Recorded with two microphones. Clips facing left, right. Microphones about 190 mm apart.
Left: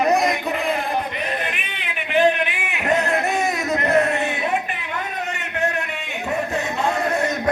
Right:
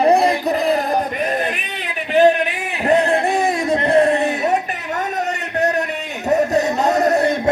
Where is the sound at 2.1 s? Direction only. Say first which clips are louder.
Right 5 dB; 40° right (ahead or behind).